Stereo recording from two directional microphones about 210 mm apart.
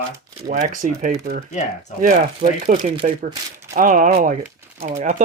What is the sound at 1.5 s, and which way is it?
Speech, 35° left (ahead or behind).